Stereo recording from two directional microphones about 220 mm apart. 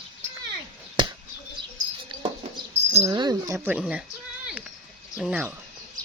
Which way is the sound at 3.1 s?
15° right (ahead or behind).